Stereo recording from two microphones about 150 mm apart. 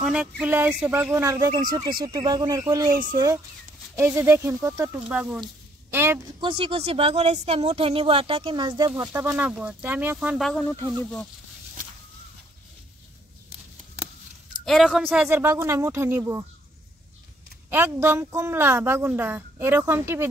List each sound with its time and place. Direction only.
0.0 s a woman's voice: 5° right (ahead or behind)
5.9 s speech: 15° right (ahead or behind)
6.4 s speech: 35° right (ahead or behind)
8.9 s a woman's voice: 15° right (ahead or behind)
10.6 s speech: 20° left (ahead or behind)
14.6 s a woman's voice: centre (ahead or behind); by 16.4 s 20° right (ahead or behind)
17.6 s a woman's voice: 15° right (ahead or behind)